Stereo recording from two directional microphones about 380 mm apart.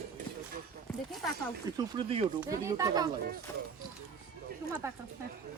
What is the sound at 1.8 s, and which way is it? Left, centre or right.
Speech, centre.